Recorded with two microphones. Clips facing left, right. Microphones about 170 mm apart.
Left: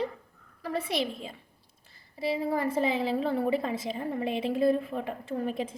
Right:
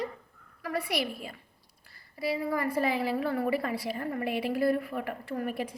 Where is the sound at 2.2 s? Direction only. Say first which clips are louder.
Left 1 dB; 25° left (ahead or behind).